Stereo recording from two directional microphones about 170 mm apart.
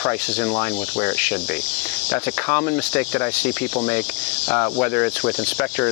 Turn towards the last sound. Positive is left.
turn(degrees=15)  # may be behind; listen again after turning